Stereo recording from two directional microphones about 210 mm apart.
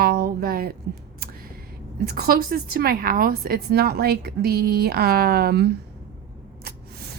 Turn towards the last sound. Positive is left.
turn(degrees=-50)  # may be behind; listen again after turning